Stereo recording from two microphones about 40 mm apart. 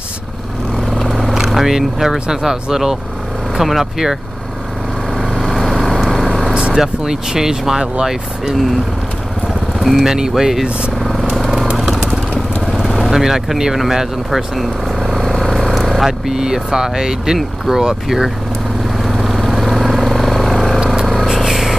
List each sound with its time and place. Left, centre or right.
0.8 s vehicle: centre
1.1 s vehicle: centre
1.7 s speech: centre
5.3 s vehicle: centre
6.4 s vehicle: right
6.8 s speech: centre
10.0 s speech: centre
11.0 s vehicle: centre
13.1 s speech: centre
13.7 s vehicle: centre
16.1 s speech: centre
19.0 s vehicle: centre
20.8 s a sound: centre
21.1 s vehicle: centre